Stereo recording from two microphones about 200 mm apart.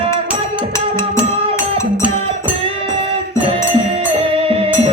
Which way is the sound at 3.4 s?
30° right (ahead or behind).